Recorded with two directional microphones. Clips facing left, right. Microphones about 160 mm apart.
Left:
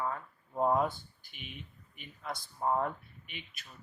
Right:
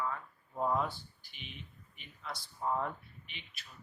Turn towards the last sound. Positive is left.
turn(degrees=50)  # may be behind; listen again after turning